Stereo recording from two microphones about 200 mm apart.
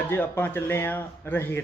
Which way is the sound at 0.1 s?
10° left (ahead or behind).